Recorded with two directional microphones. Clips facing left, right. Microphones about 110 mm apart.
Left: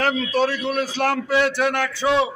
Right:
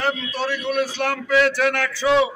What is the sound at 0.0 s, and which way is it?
A man's voice, 45° left (ahead or behind).